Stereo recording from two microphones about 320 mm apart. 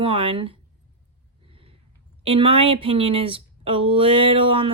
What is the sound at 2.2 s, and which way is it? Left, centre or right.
Speech, centre.